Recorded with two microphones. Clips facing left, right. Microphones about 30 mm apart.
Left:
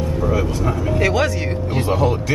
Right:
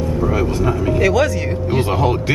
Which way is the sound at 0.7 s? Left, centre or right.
Right.